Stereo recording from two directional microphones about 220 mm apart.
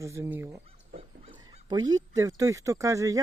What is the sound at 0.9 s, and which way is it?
Speech, 20° right (ahead or behind).